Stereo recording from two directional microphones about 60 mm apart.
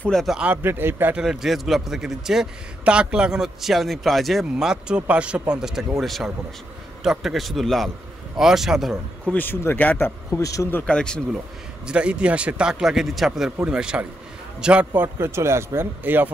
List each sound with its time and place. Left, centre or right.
0.1 s speech: centre
0.6 s a man's voice: right
1.1 s a man's voice: centre
2.8 s a man's voice: centre
5.9 s a man's voice: centre
9.3 s a man's voice: left
10.4 s speech: left
10.9 s speech: centre
11.9 s a man's voice: centre
13.7 s a man's voice: centre
15.0 s speech: right
16.0 s a man's voice: right